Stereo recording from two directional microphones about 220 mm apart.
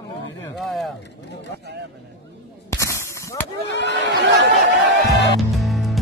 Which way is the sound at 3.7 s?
50° left (ahead or behind).